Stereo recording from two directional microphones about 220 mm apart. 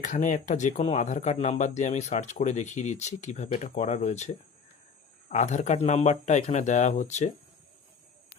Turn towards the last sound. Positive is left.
turn(degrees=30)  # may be behind; listen again after turning